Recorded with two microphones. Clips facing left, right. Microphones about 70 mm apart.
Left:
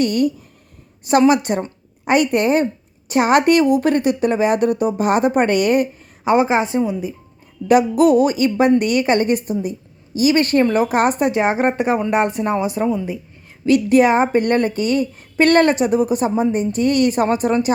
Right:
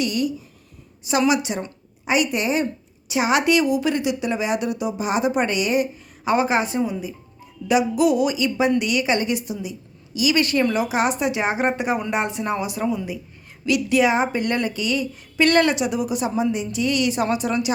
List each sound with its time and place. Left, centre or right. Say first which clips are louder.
0.0 s a woman's voice: left 6 dB; left
6.2 s a woman's voice: left 4 dB; left
7.7 s a woman's voice: left 5 dB; left